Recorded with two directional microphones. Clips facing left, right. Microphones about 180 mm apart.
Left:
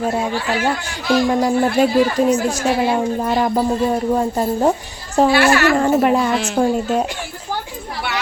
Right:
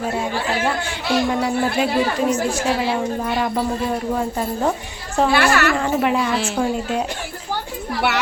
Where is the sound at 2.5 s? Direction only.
45° left (ahead or behind).